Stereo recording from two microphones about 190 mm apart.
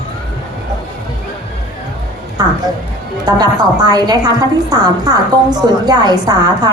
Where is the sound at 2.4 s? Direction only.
20° right (ahead or behind).